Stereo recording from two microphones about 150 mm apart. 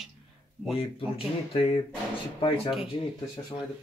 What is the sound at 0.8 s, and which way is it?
Speech, 40° left (ahead or behind).